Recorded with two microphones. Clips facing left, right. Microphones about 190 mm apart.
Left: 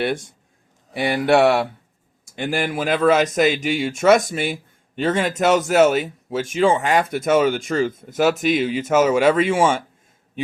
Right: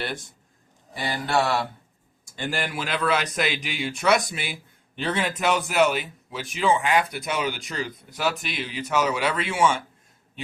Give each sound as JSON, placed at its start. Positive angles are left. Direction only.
{"t": 0.9, "sound": "speech", "side_deg": 65}
{"t": 2.4, "sound": "speech", "side_deg": 50}